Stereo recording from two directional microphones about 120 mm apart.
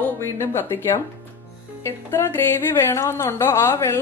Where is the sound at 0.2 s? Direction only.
20° left (ahead or behind).